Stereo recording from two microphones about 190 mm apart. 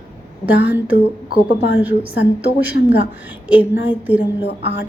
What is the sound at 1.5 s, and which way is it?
Speech, 60° left (ahead or behind).